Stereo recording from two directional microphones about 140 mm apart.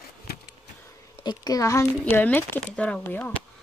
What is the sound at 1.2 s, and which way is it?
Speech, 30° left (ahead or behind).